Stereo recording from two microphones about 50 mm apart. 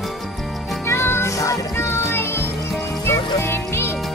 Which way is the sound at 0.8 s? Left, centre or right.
Left.